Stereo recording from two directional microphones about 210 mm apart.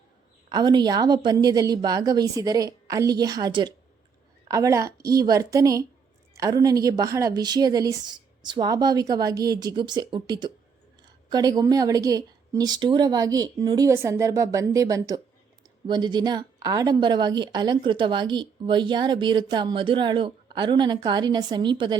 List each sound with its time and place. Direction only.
0.5 s a woman's voice: 20° right (ahead or behind)